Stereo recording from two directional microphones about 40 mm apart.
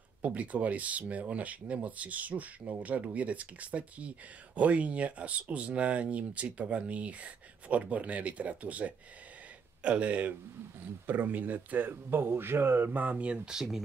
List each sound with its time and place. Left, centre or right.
0.2 s speech: right
12.9 s speech: right